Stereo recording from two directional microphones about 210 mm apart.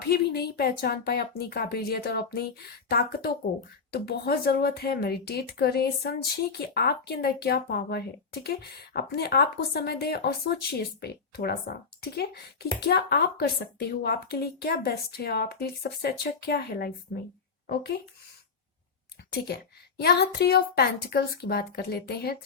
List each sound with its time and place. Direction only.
0.1 s speech: 50° left (ahead or behind)
20.0 s speech: 50° left (ahead or behind)